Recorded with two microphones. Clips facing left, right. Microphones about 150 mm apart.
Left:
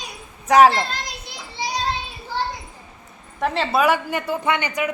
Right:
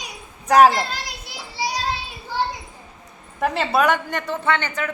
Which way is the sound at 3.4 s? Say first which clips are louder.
Even; centre (ahead or behind).